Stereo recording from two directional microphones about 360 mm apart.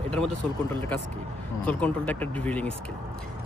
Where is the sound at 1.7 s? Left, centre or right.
Centre.